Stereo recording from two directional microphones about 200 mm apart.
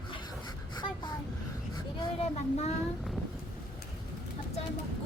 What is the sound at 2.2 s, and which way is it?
Speech, 30° left (ahead or behind).